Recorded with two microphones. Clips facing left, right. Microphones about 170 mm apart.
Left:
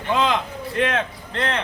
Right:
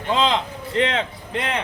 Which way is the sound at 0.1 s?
20° right (ahead or behind).